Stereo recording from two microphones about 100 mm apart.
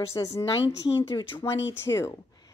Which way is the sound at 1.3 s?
25° left (ahead or behind).